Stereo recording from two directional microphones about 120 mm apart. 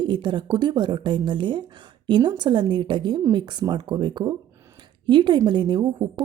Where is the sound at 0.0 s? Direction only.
40° right (ahead or behind).